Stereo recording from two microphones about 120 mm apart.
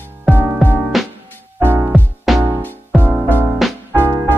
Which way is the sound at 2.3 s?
Centre (ahead or behind).